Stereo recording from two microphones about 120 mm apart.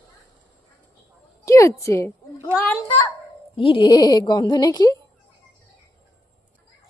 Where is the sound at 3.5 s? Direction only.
45° left (ahead or behind).